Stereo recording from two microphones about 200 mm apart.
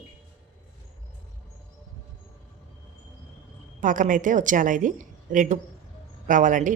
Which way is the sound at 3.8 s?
40° right (ahead or behind).